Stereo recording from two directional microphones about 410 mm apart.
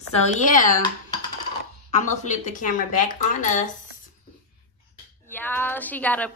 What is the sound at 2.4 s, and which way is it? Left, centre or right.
Speech, centre.